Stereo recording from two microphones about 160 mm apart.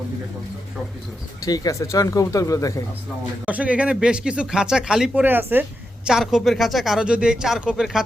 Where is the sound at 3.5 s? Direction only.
10° right (ahead or behind).